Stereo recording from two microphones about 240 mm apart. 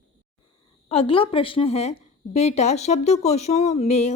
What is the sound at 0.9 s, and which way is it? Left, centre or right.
Speech, left.